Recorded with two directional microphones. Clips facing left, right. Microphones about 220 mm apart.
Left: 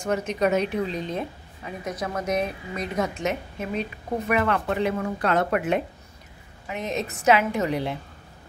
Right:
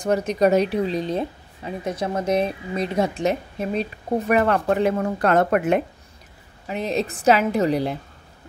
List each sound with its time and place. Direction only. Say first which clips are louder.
0.0 s a woman's voice: right 5 dB; 35° right (ahead or behind)
6.7 s speech: right 5 dB; 35° right (ahead or behind)